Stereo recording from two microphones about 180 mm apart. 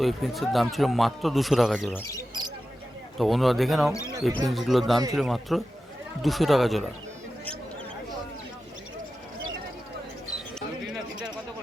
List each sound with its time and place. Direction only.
0.0 s a man's voice: centre (ahead or behind)
2.0 s speech: 20° left (ahead or behind)
3.2 s a man's voice: centre (ahead or behind)
10.8 s a sound: 5° right (ahead or behind)